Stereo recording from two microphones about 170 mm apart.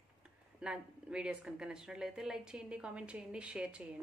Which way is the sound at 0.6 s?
5° right (ahead or behind).